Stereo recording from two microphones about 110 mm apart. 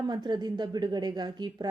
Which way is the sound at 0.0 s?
40° right (ahead or behind).